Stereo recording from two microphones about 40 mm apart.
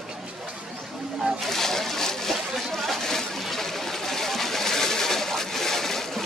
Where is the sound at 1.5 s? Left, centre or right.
Centre.